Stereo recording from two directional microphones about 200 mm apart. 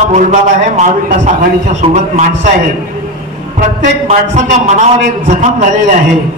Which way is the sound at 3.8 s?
40° right (ahead or behind).